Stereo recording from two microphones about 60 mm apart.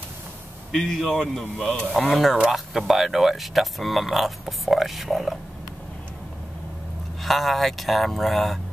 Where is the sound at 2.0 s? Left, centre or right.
Centre.